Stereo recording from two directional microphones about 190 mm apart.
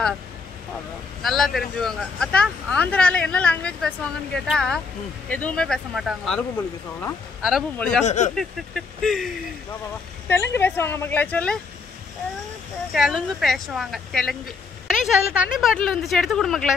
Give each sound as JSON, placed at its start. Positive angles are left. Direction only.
{"t": 1.2, "sound": "speech", "side_deg": 0}
{"t": 7.4, "sound": "speech", "side_deg": 0}
{"t": 8.0, "sound": "speech", "side_deg": 40}
{"t": 8.4, "sound": "speech", "side_deg": 0}
{"t": 10.2, "sound": "speech", "side_deg": 10}
{"t": 12.9, "sound": "speech", "side_deg": 0}